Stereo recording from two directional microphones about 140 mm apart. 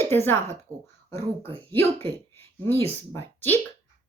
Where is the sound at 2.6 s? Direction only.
15° left (ahead or behind).